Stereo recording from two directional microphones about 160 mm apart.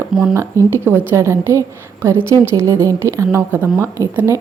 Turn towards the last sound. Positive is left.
turn(degrees=-15)  # may be behind; listen again after turning